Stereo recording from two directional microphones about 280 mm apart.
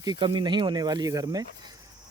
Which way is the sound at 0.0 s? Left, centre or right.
Centre.